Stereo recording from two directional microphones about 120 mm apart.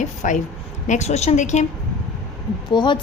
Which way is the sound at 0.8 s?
70° left (ahead or behind).